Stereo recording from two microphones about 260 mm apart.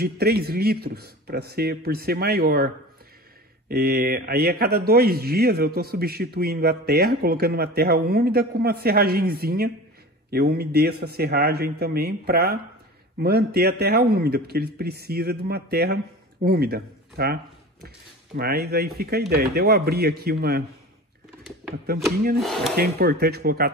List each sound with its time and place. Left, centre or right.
0.0 s speech: right
22.4 s speech: centre
22.8 s speech: right